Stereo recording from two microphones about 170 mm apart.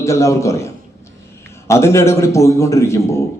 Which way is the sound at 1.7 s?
15° left (ahead or behind).